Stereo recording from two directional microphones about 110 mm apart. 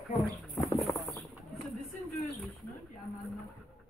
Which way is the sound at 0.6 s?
Centre (ahead or behind).